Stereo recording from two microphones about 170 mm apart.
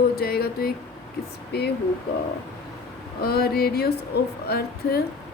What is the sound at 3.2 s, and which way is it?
A woman's voice, 65° left (ahead or behind).